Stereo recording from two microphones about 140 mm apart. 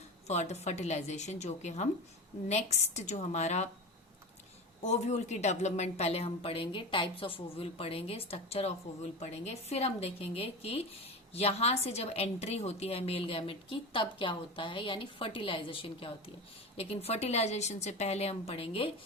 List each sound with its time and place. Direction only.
0.3 s a woman's voice: 50° left (ahead or behind)
4.8 s a woman's voice: 55° left (ahead or behind)